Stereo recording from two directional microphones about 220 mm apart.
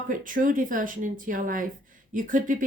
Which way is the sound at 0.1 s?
35° right (ahead or behind).